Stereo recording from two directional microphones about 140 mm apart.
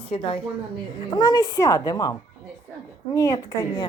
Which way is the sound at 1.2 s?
30° left (ahead or behind).